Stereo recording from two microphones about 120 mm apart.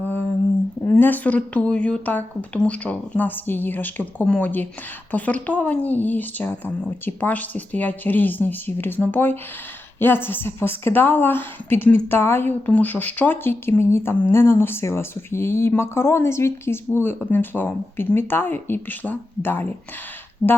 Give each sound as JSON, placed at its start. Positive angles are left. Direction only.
{"t": 0.9, "sound": "a woman's voice", "side_deg": 15}
{"t": 20.4, "sound": "speech", "side_deg": 40}